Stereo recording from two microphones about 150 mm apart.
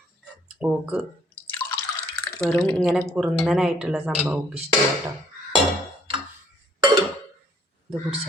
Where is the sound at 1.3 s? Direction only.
15° left (ahead or behind).